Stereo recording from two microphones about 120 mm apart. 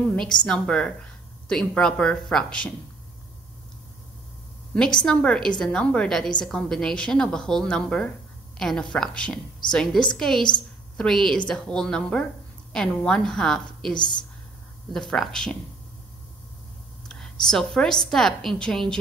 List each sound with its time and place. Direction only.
0.0 s a woman's voice: 5° left (ahead or behind)
4.7 s a woman's voice: 5° left (ahead or behind)
13.9 s a woman's voice: 40° left (ahead or behind)
14.9 s a woman's voice: 5° left (ahead or behind)
17.1 s a woman's voice: 5° left (ahead or behind)